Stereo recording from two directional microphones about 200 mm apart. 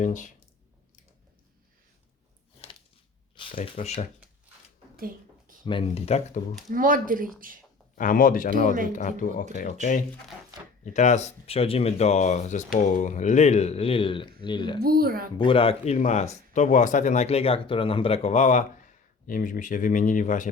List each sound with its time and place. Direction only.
0.0 s speech: 40° left (ahead or behind)
3.5 s speech: 35° left (ahead or behind)
4.9 s a sound: 45° right (ahead or behind)
5.6 s speech: 25° left (ahead or behind)
6.7 s speech: 45° right (ahead or behind)
7.9 s speech: 45° left (ahead or behind)
10.8 s speech: 35° left (ahead or behind)
14.8 s speech: 50° right (ahead or behind)
15.4 s speech: 25° left (ahead or behind)